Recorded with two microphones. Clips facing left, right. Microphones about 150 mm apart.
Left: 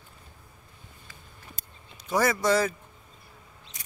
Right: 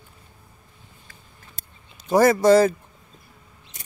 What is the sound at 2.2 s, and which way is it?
Speech, 35° right (ahead or behind).